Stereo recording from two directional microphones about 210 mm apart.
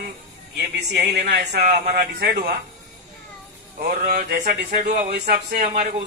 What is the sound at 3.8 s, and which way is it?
A man's voice, 40° right (ahead or behind).